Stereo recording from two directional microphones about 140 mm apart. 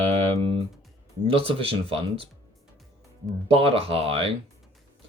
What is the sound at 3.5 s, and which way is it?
Speech, 45° right (ahead or behind).